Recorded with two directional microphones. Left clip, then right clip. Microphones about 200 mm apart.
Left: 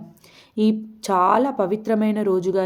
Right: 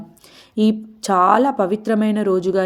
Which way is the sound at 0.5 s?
25° right (ahead or behind).